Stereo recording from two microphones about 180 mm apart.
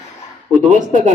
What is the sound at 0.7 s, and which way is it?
Speech, 45° right (ahead or behind).